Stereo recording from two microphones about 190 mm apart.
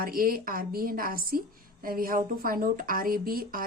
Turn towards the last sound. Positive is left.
turn(degrees=-50)  # may be behind; listen again after turning